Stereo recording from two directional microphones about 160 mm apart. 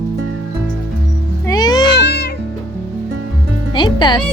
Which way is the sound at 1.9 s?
90° left.